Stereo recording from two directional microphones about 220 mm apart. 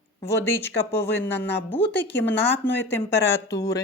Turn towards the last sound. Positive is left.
turn(degrees=15)  # may be behind; listen again after turning